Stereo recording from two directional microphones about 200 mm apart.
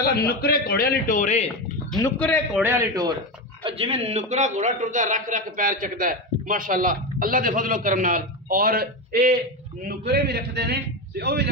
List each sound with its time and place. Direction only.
0.0 s a man's voice: 50° left (ahead or behind); by 1.5 s 35° left (ahead or behind)
2.0 s a man's voice: 10° left (ahead or behind)
2.6 s a man's voice: 15° right (ahead or behind)
3.6 s a man's voice: 30° right (ahead or behind); by 11.4 s 55° right (ahead or behind)